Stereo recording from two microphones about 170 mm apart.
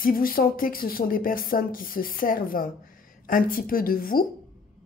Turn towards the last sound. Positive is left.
turn(degrees=55)  # may be behind; listen again after turning